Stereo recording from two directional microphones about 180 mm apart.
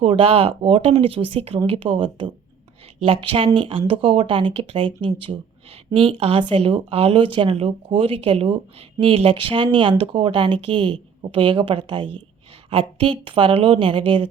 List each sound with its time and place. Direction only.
0.0 s speech: 30° right (ahead or behind)